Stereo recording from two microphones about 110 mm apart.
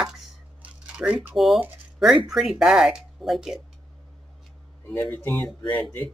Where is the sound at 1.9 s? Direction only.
5° right (ahead or behind).